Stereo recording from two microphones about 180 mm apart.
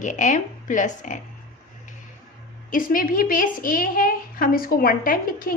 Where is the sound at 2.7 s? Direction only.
50° left (ahead or behind).